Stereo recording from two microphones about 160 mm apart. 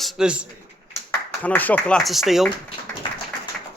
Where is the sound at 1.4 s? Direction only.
10° left (ahead or behind).